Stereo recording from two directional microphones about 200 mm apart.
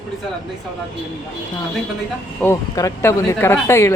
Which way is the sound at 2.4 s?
15° left (ahead or behind).